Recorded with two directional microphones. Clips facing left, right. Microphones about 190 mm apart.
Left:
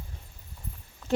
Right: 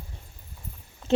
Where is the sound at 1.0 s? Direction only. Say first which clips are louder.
Right 4 dB; 25° right (ahead or behind).